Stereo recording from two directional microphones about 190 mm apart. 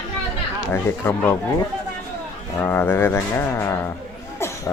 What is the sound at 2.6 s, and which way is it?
Speech, 10° left (ahead or behind).